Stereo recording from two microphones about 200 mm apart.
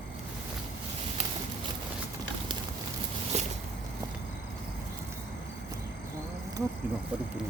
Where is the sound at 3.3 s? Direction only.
35° right (ahead or behind).